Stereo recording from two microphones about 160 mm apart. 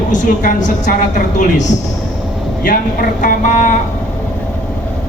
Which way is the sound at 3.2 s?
55° left (ahead or behind).